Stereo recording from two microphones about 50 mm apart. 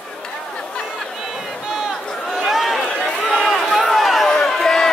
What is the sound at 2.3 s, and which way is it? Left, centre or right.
Run, centre.